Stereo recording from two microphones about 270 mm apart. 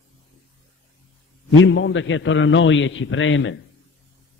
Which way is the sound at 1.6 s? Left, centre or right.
Left.